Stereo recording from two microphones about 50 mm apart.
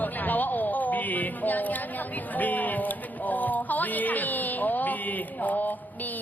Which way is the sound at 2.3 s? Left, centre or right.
Left.